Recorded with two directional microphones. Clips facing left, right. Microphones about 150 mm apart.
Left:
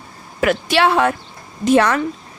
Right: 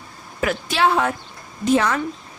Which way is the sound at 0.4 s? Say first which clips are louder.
Left 4 dB; 75° left (ahead or behind).